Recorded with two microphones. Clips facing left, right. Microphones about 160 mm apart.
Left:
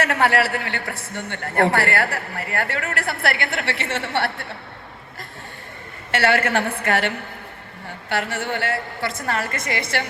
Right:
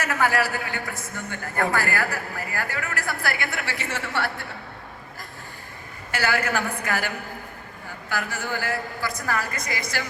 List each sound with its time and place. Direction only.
0.0 s a man's voice: 70° left (ahead or behind)
6.1 s a man's voice: 70° left (ahead or behind)
8.2 s a man's voice: 25° left (ahead or behind)
8.4 s a man's voice: 70° left (ahead or behind)
9.0 s a man's voice: 25° left (ahead or behind)
9.3 s a man's voice: 75° left (ahead or behind)